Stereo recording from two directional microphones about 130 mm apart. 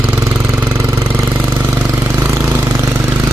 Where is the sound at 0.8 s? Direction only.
25° right (ahead or behind).